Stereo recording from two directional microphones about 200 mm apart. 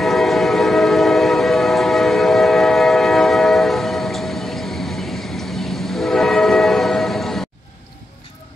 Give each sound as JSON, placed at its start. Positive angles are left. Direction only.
{"t": 0.0, "sound": "train", "side_deg": 0}